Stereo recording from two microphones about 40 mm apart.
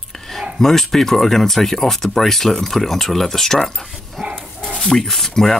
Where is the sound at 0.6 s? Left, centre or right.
Centre.